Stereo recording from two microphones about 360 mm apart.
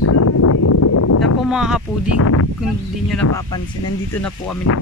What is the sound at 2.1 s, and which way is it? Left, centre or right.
Speech, left.